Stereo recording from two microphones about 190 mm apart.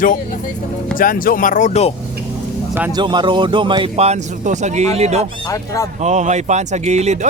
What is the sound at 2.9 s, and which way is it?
Speech, 25° right (ahead or behind).